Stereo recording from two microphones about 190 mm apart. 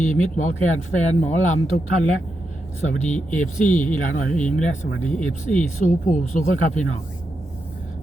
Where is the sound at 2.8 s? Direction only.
40° left (ahead or behind).